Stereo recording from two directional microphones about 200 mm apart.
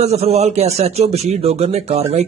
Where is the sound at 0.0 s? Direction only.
30° right (ahead or behind).